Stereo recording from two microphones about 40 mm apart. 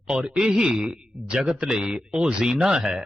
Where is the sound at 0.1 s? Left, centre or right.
Right.